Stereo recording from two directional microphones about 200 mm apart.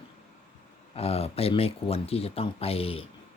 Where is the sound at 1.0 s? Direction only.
30° left (ahead or behind).